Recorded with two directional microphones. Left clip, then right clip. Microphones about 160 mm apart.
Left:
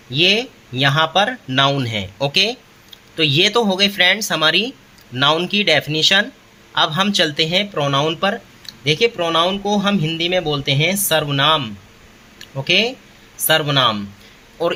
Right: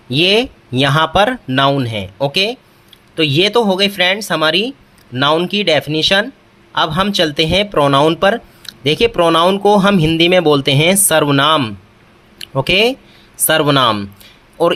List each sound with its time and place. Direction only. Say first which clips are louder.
0.1 s speech: right 3 dB; 35° right (ahead or behind)